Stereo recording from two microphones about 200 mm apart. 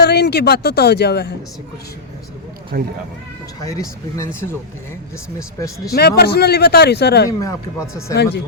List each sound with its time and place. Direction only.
0.0 s speech: 55° left (ahead or behind)
2.7 s speech: 45° right (ahead or behind)
3.7 s speech: 15° left (ahead or behind)
5.5 s speech: 15° left (ahead or behind)
5.9 s speech: 50° left (ahead or behind)
7.3 s speech: 15° left (ahead or behind)
8.1 s speech: 55° left (ahead or behind)